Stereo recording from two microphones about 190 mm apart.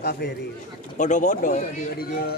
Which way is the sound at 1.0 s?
40° left (ahead or behind).